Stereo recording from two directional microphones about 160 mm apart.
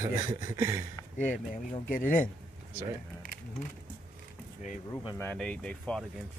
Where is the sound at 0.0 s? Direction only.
30° right (ahead or behind).